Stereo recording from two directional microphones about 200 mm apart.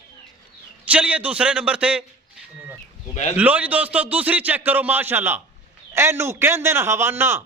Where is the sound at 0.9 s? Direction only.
5° right (ahead or behind).